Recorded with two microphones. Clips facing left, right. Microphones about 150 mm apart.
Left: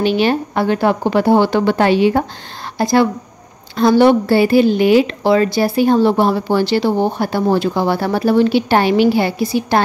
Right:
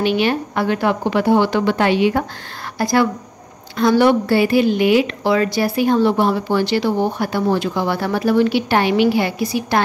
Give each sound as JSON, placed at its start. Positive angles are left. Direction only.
{"t": 0.0, "sound": "a woman's voice", "side_deg": 35}